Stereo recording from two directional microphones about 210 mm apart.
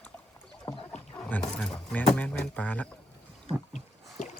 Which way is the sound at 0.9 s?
5° left (ahead or behind).